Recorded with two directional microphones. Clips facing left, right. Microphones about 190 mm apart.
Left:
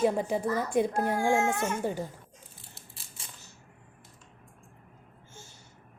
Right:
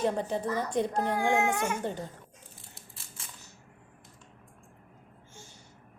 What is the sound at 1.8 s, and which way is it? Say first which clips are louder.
Speech: left 3 dB; 10° left (ahead or behind).